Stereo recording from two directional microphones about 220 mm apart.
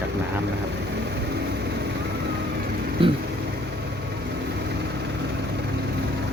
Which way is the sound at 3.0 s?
25° right (ahead or behind).